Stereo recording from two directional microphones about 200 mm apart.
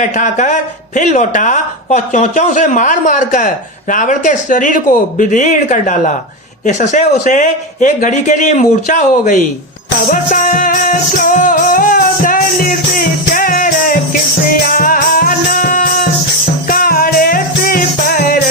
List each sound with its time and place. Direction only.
0.2 s speech: 40° left (ahead or behind)
10.1 s music: 40° left (ahead or behind)